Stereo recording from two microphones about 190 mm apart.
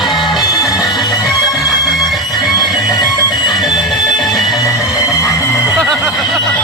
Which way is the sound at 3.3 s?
Centre (ahead or behind).